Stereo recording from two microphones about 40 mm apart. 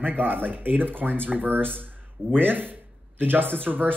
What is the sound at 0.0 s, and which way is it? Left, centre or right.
Speech, right.